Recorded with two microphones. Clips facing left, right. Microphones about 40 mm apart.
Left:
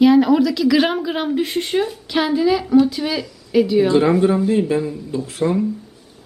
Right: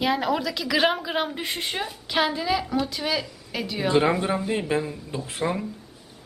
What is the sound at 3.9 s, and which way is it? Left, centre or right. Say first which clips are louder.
Speech: left 7 dB; centre.